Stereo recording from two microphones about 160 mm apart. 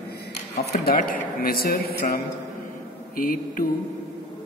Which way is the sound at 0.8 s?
65° left (ahead or behind).